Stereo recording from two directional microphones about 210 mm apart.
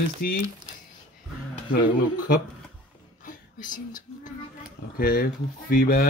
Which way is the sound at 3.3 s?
40° left (ahead or behind).